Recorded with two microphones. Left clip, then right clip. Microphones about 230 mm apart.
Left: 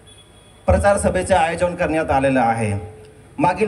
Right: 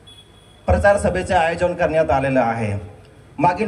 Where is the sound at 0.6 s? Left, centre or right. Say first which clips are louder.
Even; left.